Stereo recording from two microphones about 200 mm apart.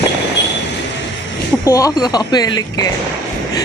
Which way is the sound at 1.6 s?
15° left (ahead or behind).